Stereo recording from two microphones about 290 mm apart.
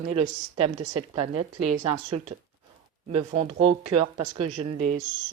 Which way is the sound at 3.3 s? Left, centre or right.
Right.